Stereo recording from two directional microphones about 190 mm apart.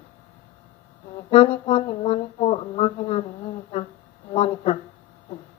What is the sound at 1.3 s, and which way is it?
Speech, 30° left (ahead or behind).